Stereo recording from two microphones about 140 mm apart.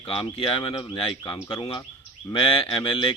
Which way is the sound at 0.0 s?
40° left (ahead or behind).